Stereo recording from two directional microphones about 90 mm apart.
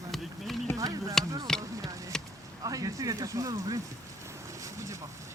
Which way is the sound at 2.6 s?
40° right (ahead or behind).